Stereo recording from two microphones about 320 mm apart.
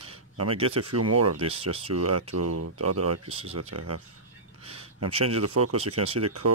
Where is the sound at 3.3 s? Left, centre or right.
Centre.